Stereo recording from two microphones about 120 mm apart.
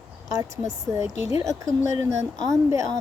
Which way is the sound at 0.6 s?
25° right (ahead or behind).